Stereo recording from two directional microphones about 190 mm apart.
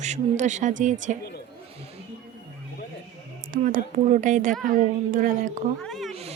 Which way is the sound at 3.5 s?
45° right (ahead or behind).